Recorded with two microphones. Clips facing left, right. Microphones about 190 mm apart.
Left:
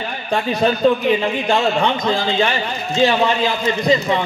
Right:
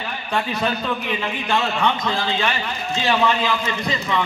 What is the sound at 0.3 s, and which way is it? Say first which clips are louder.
A man's voice: left 5 dB; 40° left (ahead or behind).